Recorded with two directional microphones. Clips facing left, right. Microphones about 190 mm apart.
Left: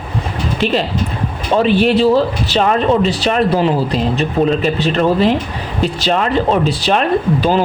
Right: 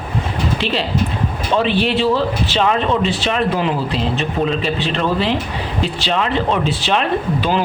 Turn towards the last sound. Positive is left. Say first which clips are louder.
# left 4 dB
turn(degrees=40)  # may be behind; listen again after turning